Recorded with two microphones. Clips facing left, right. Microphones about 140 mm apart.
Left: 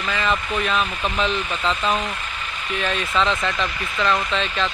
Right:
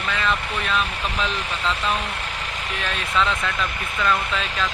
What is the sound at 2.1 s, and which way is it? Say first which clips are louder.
Vehicle: right 1 dB; 85° right.